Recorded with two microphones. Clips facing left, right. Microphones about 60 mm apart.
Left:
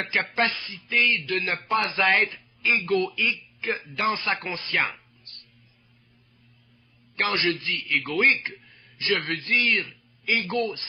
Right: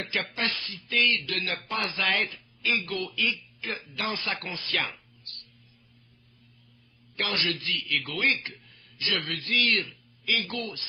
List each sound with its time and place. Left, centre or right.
0.0 s speech: left
7.2 s speech: left